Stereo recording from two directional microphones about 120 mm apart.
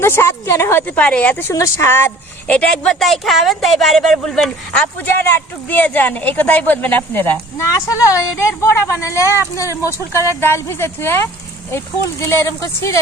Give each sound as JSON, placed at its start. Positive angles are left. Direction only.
{"t": 0.0, "sound": "speech", "side_deg": 20}
{"t": 4.9, "sound": "speech", "side_deg": 15}
{"t": 7.7, "sound": "speech", "side_deg": 30}